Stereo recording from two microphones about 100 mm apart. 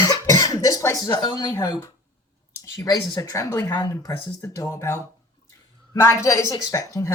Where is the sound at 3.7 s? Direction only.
40° left (ahead or behind).